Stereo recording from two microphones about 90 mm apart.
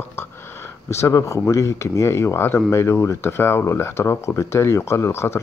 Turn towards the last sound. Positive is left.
turn(degrees=30)  # may be behind; listen again after turning